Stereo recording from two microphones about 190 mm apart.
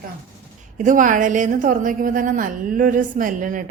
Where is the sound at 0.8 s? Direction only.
45° right (ahead or behind).